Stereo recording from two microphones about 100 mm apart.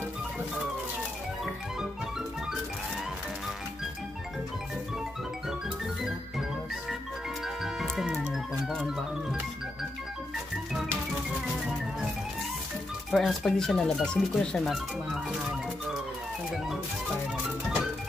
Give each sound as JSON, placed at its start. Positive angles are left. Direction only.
{"t": 7.4, "sound": "music", "side_deg": 0}
{"t": 13.1, "sound": "speech", "side_deg": 0}